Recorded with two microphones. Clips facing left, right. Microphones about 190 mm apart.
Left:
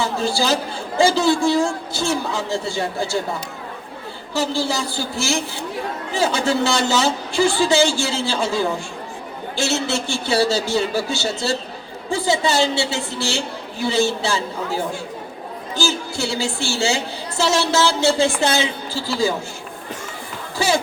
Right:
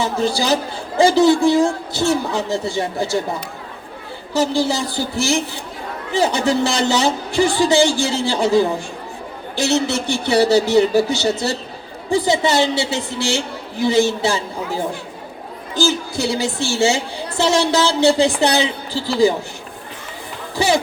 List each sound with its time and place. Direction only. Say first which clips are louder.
0.0 s a woman's voice: right 2 dB; 20° right (ahead or behind)
4.4 s a woman's voice: right 4 dB; 20° right (ahead or behind)
20.6 s a woman's voice: right 3 dB; 20° right (ahead or behind)